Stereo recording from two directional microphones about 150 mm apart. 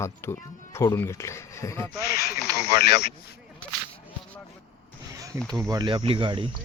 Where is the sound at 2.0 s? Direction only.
90° left.